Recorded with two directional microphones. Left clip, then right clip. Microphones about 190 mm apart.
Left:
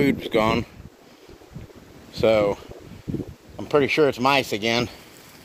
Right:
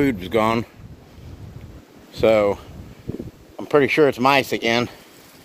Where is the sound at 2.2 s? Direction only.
20° right (ahead or behind).